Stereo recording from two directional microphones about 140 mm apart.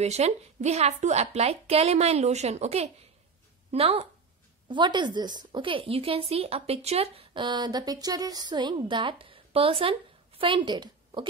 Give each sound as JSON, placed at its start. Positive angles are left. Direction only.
{"t": 0.0, "sound": "speech", "side_deg": -50}
{"t": 4.6, "sound": "a woman's voice", "side_deg": -35}